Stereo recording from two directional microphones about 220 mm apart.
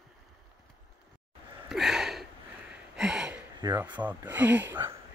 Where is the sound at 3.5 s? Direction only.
15° right (ahead or behind).